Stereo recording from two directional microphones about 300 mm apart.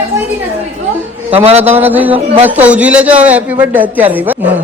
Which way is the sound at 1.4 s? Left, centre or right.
Right.